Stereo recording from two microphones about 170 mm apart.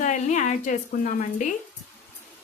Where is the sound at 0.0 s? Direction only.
45° left (ahead or behind).